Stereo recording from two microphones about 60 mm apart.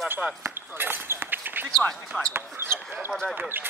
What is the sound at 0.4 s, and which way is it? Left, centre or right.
Basketball bounce, right.